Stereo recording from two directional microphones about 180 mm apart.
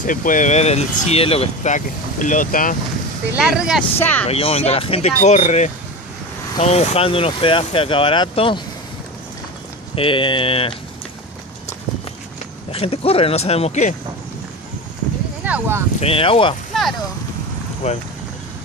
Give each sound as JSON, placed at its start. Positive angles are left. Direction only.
{"t": 0.0, "sound": "speech", "side_deg": 45}
{"t": 3.3, "sound": "speech", "side_deg": -5}
{"t": 4.0, "sound": "speech", "side_deg": 10}
{"t": 4.3, "sound": "speech", "side_deg": 35}
{"t": 9.9, "sound": "speech", "side_deg": 30}
{"t": 12.7, "sound": "speech", "side_deg": 30}
{"t": 15.4, "sound": "speech", "side_deg": -10}
{"t": 16.0, "sound": "speech", "side_deg": 30}
{"t": 17.8, "sound": "speech", "side_deg": 35}